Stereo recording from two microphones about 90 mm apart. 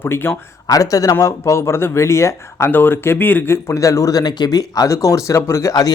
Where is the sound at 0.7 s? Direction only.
40° left (ahead or behind).